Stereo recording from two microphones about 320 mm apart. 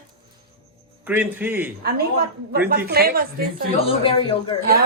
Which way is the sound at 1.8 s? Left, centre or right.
Right.